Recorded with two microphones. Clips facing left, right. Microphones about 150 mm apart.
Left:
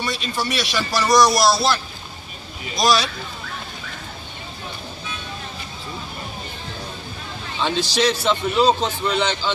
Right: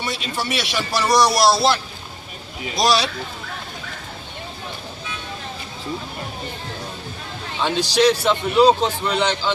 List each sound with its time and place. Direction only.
0.0 s a man's voice: 20° right (ahead or behind)
2.8 s speech: 30° right (ahead or behind)
7.6 s a man's voice: 10° right (ahead or behind)